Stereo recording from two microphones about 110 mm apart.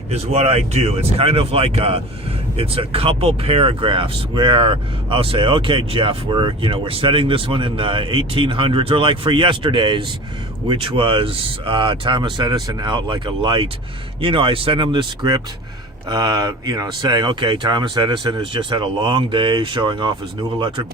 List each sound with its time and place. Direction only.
0.1 s speech: 70° right (ahead or behind); by 20.8 s 50° right (ahead or behind)